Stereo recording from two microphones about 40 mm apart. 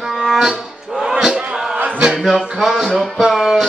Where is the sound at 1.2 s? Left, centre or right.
Centre.